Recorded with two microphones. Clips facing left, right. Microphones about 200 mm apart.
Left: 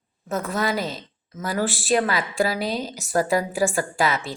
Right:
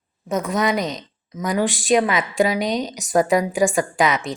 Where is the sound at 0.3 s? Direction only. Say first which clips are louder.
Right 4 dB; 15° right (ahead or behind).